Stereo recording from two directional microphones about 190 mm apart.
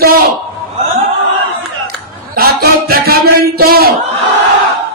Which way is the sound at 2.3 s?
55° right (ahead or behind).